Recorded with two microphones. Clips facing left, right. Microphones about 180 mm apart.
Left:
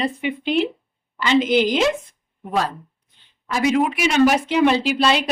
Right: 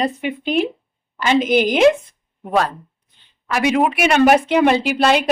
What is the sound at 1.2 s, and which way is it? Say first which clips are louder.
Speech: right 1 dB; 50° right (ahead or behind).